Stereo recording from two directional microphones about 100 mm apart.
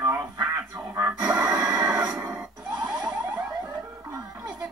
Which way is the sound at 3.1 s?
15° right (ahead or behind).